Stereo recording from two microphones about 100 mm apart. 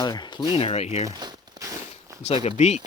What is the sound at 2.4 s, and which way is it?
Speech, 90° left.